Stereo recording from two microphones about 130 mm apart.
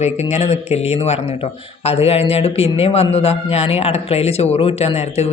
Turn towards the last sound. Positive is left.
turn(degrees=55)  # may be behind; listen again after turning